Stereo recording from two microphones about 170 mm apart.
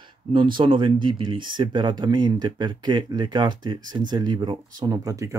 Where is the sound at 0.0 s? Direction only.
30° right (ahead or behind).